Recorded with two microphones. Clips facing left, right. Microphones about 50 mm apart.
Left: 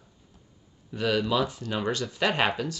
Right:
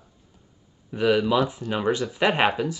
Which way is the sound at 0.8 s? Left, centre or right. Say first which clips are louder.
Right 5 dB; centre.